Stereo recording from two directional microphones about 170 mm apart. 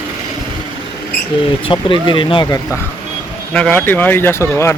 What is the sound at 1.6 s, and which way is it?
Speech, 30° left (ahead or behind).